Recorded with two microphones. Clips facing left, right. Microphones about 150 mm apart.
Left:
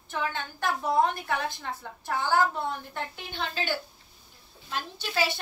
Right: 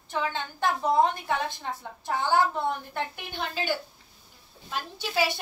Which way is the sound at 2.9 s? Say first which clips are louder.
Right 3 dB; 10° right (ahead or behind).